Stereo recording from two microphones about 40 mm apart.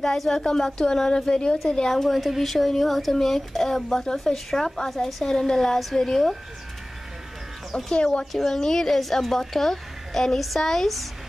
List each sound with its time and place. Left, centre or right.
0.0 s a child's voice: centre
2.0 s a child's voice: centre
7.7 s speech: left
8.5 s a child's voice: centre